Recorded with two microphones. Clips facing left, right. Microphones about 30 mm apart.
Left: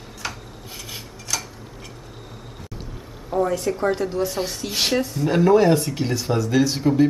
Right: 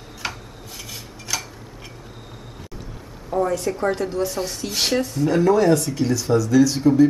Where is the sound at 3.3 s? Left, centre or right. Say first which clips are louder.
Even; centre.